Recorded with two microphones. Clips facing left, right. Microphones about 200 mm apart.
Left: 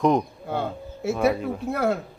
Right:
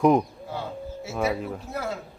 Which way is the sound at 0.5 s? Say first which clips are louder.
Left 4 dB; 55° left (ahead or behind).